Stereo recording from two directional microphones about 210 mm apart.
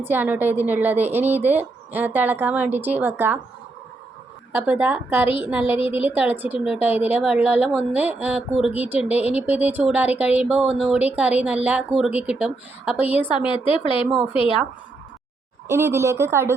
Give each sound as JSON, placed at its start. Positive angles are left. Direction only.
{"t": 0.0, "sound": "speech", "side_deg": -10}
{"t": 4.5, "sound": "speech", "side_deg": -5}
{"t": 13.4, "sound": "speech", "side_deg": 25}
{"t": 15.6, "sound": "speech", "side_deg": -10}